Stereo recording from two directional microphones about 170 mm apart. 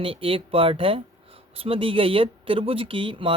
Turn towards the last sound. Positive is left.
turn(degrees=-30)  # may be behind; listen again after turning